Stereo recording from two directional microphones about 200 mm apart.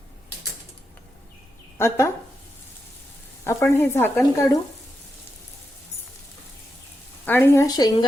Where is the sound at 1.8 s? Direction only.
15° left (ahead or behind).